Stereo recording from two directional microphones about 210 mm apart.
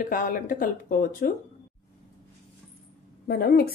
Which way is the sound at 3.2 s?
50° left (ahead or behind).